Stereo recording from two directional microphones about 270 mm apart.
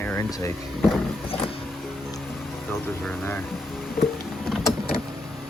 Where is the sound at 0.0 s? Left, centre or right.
Centre.